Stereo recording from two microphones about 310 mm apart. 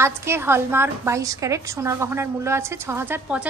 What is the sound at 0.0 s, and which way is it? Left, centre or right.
A woman's voice, centre.